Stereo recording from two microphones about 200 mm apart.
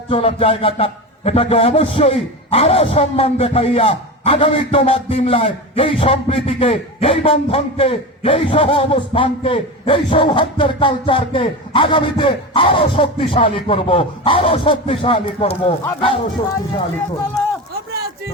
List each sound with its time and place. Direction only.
0.1 s a man's voice: 30° left (ahead or behind)